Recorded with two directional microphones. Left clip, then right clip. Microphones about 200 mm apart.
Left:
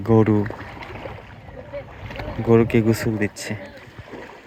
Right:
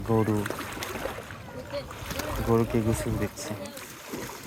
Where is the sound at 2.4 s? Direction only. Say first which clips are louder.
Left 9 dB; 35° left (ahead or behind).